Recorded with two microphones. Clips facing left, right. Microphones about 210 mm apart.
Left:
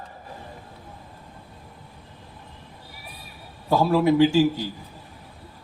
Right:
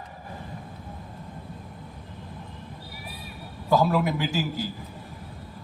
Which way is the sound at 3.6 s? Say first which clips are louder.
Left 3 dB; 25° left (ahead or behind).